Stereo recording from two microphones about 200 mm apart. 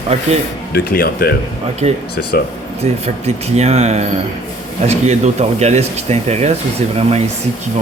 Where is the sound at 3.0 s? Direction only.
30° right (ahead or behind).